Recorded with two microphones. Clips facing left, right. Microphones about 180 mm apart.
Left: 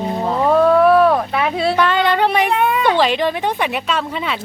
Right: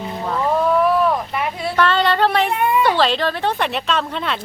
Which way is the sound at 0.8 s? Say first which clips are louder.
Left 5 dB; 65° left (ahead or behind).